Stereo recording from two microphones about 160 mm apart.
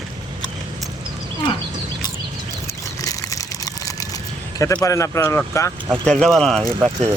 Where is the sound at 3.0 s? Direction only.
20° left (ahead or behind).